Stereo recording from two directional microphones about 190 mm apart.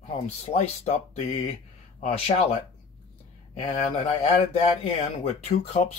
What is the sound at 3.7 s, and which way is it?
Speech, 35° left (ahead or behind).